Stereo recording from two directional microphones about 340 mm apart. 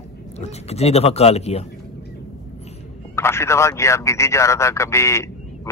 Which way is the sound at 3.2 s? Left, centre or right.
Centre.